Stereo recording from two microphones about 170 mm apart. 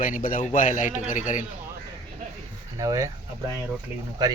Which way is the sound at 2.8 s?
20° right (ahead or behind).